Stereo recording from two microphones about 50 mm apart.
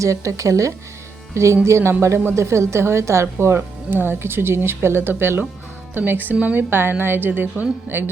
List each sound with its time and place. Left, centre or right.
0.0 s speech: right
1.3 s a woman's voice: right
3.8 s speech: right
6.7 s speech: right